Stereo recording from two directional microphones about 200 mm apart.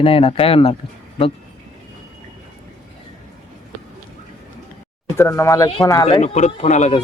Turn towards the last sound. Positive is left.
turn(degrees=35)  # may be behind; listen again after turning